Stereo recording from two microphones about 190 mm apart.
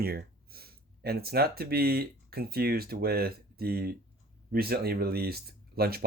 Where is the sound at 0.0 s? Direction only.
55° right (ahead or behind).